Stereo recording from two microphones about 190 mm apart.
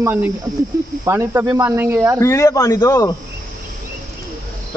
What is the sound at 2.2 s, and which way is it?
Speech, 15° left (ahead or behind).